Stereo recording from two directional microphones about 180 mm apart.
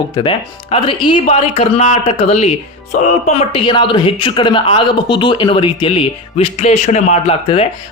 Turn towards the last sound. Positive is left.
turn(degrees=35)  # may be behind; listen again after turning